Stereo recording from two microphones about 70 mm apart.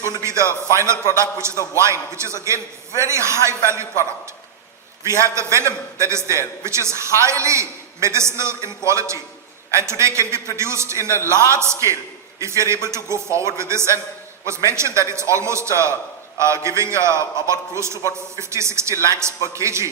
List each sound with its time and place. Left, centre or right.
0.2 s a man's voice: right
5.0 s a man's voice: right